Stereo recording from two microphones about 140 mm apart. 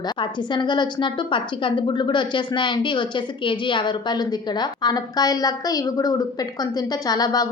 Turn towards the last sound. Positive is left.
turn(degrees=30)  # may be behind; listen again after turning